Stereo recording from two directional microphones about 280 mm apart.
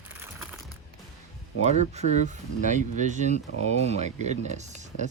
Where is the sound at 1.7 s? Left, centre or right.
Right.